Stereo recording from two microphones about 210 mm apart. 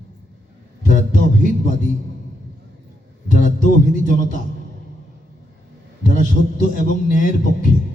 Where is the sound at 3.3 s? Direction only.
40° left (ahead or behind).